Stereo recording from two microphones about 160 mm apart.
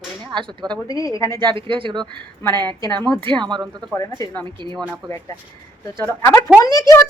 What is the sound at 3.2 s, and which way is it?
Speech, 30° right (ahead or behind).